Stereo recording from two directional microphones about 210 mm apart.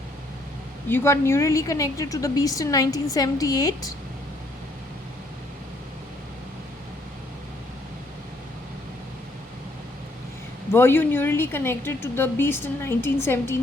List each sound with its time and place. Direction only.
0.9 s a woman's voice: 10° left (ahead or behind)
10.7 s a woman's voice: 10° left (ahead or behind)